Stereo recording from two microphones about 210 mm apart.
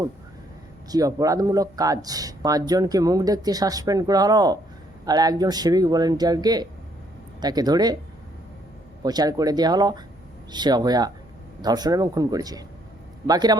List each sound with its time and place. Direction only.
0.9 s speech: 15° right (ahead or behind)
9.0 s speech: 20° right (ahead or behind)